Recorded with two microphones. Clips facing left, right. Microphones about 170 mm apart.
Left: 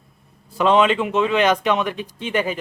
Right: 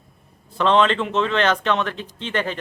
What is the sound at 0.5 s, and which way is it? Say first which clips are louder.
Speech: left 2 dB; 10° left (ahead or behind).